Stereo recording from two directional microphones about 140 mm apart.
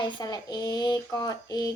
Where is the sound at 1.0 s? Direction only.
25° left (ahead or behind).